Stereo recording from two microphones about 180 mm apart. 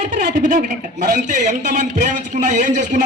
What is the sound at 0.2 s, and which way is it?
A man's voice, 50° right (ahead or behind).